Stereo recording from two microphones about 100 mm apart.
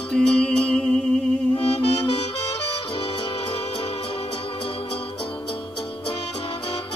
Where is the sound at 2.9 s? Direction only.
55° left (ahead or behind).